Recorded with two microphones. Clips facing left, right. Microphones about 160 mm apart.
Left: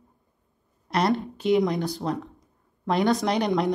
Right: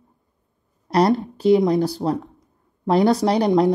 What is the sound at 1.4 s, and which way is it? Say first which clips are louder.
Speech: right 7 dB; 35° right (ahead or behind).